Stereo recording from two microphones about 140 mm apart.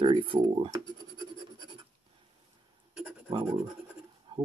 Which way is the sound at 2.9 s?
5° right (ahead or behind).